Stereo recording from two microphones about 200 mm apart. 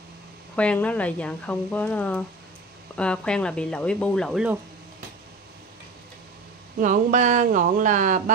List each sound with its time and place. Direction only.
0.6 s speech: 5° left (ahead or behind)
6.8 s speech: 40° right (ahead or behind)